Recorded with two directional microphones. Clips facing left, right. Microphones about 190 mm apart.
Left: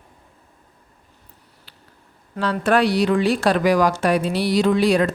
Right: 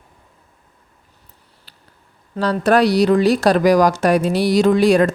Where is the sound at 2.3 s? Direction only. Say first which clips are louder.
Right 3 dB; 40° right (ahead or behind).